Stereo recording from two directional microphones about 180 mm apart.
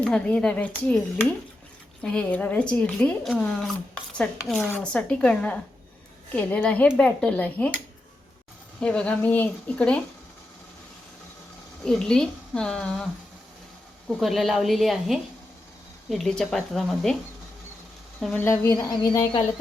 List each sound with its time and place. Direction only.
0.0 s speech: 5° left (ahead or behind)
8.8 s speech: 5° left (ahead or behind)
11.8 s speech: 5° left (ahead or behind)
14.1 s speech: centre (ahead or behind)
18.2 s speech: 5° left (ahead or behind)